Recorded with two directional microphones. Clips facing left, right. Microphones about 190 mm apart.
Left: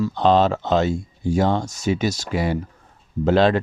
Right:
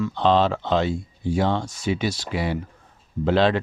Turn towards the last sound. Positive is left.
turn(degrees=45)  # may be behind; listen again after turning